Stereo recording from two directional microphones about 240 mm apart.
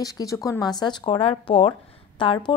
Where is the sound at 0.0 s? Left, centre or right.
Centre.